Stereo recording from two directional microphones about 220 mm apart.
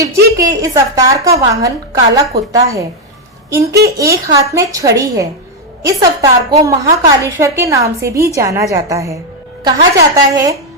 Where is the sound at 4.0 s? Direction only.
15° right (ahead or behind).